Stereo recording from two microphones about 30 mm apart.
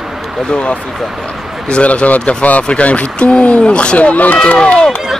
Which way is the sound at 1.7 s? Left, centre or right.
Left.